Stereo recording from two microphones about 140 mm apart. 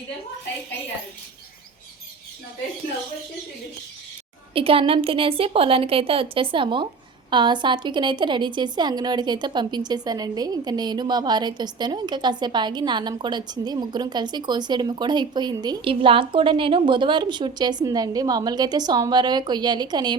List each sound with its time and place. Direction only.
4.5 s a woman's voice: 40° right (ahead or behind)